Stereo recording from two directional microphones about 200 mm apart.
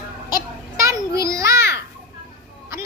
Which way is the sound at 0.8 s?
15° right (ahead or behind).